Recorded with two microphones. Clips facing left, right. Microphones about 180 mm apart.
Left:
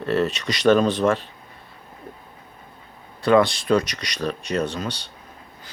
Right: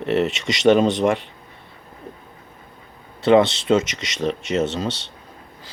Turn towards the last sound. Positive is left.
turn(degrees=-25)  # may be behind; listen again after turning